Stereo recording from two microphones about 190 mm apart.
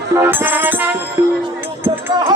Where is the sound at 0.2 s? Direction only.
10° right (ahead or behind).